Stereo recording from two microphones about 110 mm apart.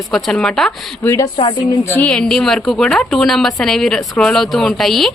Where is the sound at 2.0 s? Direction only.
10° left (ahead or behind).